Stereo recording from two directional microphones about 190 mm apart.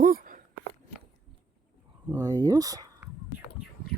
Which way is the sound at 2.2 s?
20° right (ahead or behind).